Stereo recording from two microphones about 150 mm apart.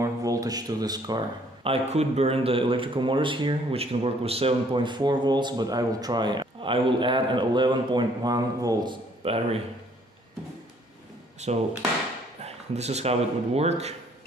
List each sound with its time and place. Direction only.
0.0 s speech: 25° right (ahead or behind)
9.2 s speech: 40° right (ahead or behind)
11.4 s speech: 50° right (ahead or behind)